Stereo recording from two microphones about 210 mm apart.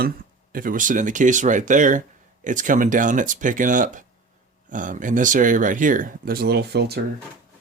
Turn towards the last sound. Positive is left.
turn(degrees=-50)  # may be behind; listen again after turning